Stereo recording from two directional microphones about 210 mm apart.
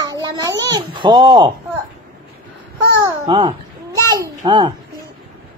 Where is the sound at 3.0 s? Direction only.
25° right (ahead or behind).